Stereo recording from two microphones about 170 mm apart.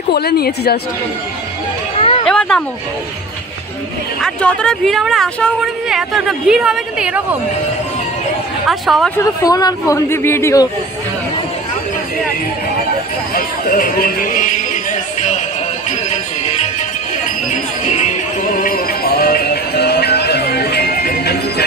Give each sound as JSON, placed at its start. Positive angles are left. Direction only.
{"t": 0.1, "sound": "a woman's voice", "side_deg": 65}
{"t": 2.0, "sound": "a sound", "side_deg": 35}
{"t": 2.2, "sound": "speech", "side_deg": 5}
{"t": 4.2, "sound": "a woman's voice", "side_deg": 5}
{"t": 8.6, "sound": "a woman's voice", "side_deg": 0}
{"t": 9.1, "sound": "speech", "side_deg": 20}
{"t": 13.3, "sound": "speech", "side_deg": 55}
{"t": 17.5, "sound": "jingle bell", "side_deg": 45}
{"t": 18.6, "sound": "music", "side_deg": 60}